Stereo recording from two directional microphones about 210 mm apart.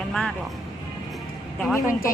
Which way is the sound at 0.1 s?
5° left (ahead or behind).